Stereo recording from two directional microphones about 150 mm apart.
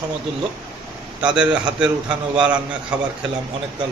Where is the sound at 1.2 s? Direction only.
5° right (ahead or behind).